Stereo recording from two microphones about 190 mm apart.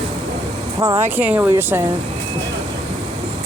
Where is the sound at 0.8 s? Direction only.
15° right (ahead or behind).